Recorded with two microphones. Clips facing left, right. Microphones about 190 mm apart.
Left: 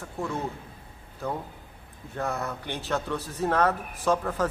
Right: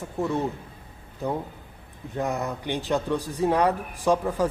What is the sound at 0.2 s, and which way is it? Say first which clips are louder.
A man's voice: right 5 dB; 20° right (ahead or behind).